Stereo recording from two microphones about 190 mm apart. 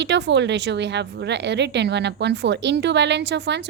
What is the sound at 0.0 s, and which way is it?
A woman's voice, 65° right (ahead or behind).